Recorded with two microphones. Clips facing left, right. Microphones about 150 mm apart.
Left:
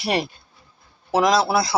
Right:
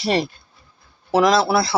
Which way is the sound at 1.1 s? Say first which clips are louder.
Right 2 dB; 20° left (ahead or behind).